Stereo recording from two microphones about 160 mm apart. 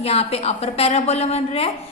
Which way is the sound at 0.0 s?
40° left (ahead or behind).